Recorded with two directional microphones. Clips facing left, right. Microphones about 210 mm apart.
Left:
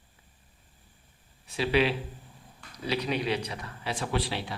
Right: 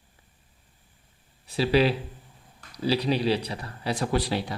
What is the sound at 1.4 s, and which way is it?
A man's voice, 35° right (ahead or behind).